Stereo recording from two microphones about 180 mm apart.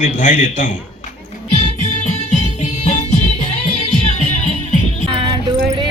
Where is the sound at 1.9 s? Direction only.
40° left (ahead or behind).